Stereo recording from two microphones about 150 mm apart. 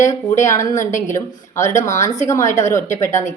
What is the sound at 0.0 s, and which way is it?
Speech, 20° left (ahead or behind).